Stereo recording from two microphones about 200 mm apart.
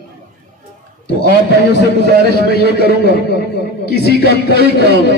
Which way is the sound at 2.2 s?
55° right (ahead or behind).